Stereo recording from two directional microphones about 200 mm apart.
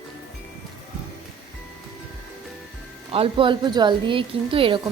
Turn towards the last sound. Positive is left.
turn(degrees=-25)  # may be behind; listen again after turning